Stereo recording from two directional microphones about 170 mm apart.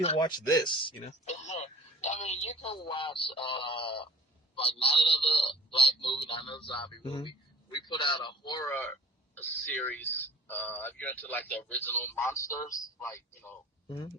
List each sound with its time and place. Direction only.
0.2 s speech: 20° left (ahead or behind)
1.2 s a man's voice: 40° left (ahead or behind); by 8.7 s 25° left (ahead or behind)
8.7 s speech: 10° left (ahead or behind)
13.8 s speech: 25° left (ahead or behind)